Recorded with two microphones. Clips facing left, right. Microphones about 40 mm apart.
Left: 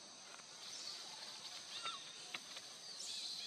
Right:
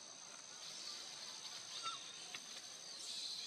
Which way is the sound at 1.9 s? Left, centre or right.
Left.